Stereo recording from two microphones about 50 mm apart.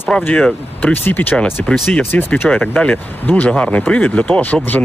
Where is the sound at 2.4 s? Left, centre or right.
Left.